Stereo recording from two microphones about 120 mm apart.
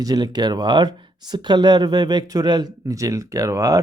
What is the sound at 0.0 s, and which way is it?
Speech, 35° right (ahead or behind).